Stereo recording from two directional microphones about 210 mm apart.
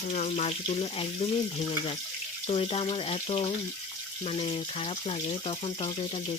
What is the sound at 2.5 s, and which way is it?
Speech, 25° left (ahead or behind).